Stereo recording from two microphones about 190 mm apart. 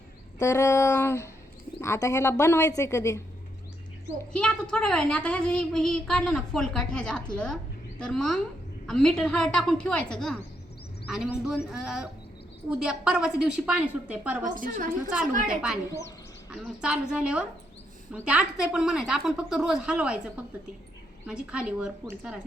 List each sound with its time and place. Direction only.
0.3 s speech: 15° left (ahead or behind)
4.4 s a child's voice: 5° left (ahead or behind)
14.4 s a woman's voice: 45° right (ahead or behind)
16.5 s a child's voice: 5° right (ahead or behind)